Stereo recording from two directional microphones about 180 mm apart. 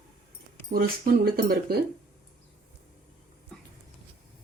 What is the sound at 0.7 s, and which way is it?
Speech, 55° right (ahead or behind).